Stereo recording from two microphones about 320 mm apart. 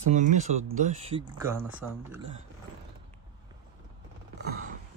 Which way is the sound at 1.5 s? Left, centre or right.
Centre.